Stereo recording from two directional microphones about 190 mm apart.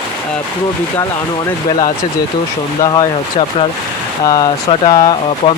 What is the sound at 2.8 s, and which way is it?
Speech, 15° left (ahead or behind).